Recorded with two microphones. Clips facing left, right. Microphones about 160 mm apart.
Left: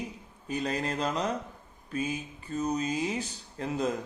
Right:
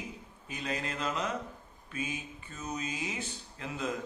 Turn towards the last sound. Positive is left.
turn(degrees=40)  # may be behind; listen again after turning